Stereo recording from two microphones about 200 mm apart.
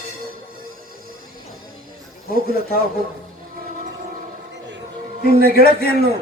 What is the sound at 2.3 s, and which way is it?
Speech, 50° left (ahead or behind).